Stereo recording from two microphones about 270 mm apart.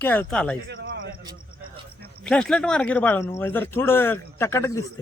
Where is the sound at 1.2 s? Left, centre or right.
Centre.